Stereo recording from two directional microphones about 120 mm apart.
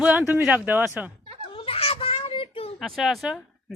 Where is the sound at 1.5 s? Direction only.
50° left (ahead or behind).